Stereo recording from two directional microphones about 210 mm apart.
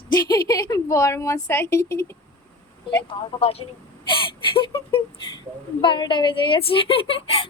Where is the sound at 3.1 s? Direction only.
25° left (ahead or behind).